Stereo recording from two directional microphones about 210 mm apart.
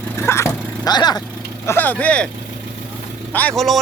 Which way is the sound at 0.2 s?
10° left (ahead or behind).